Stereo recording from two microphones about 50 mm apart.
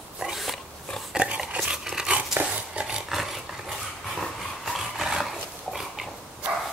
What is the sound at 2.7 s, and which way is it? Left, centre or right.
Dog, right.